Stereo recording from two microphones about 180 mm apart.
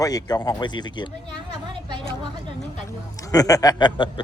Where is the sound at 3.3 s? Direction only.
20° left (ahead or behind).